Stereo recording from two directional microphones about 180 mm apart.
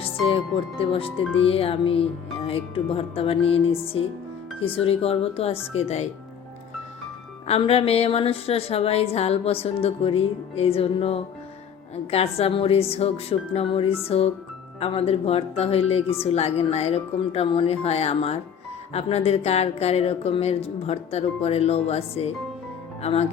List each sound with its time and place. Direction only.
0.0 s a woman's voice: 30° left (ahead or behind)
7.4 s a woman's voice: 35° left (ahead or behind)